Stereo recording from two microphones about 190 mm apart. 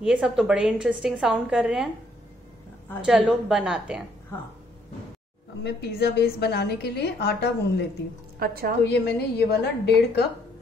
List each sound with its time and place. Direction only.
0.0 s a woman's voice: 5° right (ahead or behind)
3.1 s a woman's voice: 5° right (ahead or behind)
5.6 s a woman's voice: 60° left (ahead or behind)
8.4 s a woman's voice: 50° right (ahead or behind)
8.8 s a woman's voice: 60° left (ahead or behind)